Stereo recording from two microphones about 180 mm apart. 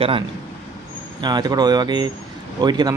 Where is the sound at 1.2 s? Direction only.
25° right (ahead or behind).